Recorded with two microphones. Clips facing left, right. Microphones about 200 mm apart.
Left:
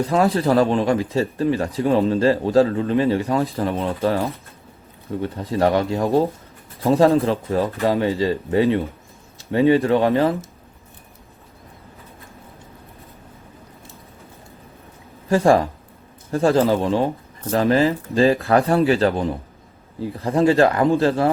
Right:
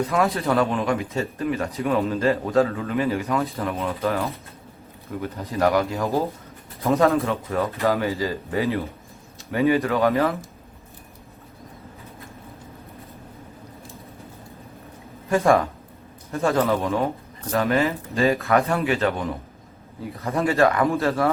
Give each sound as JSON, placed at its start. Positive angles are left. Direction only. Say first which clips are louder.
{"t": 0.1, "sound": "speech", "louder": "left 4 dB", "side_deg": 30}
{"t": 15.3, "sound": "speech", "louder": "left 3 dB", "side_deg": 30}